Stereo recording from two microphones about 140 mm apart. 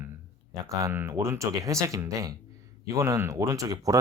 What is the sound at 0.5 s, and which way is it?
Speech, 25° right (ahead or behind).